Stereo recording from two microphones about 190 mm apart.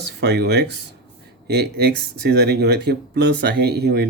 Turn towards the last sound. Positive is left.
turn(degrees=-60)  # may be behind; listen again after turning